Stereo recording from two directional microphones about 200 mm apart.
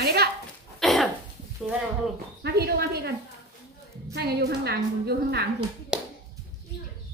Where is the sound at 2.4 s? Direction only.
55° right (ahead or behind).